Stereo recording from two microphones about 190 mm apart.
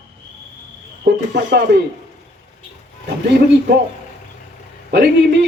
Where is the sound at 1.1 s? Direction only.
60° right (ahead or behind).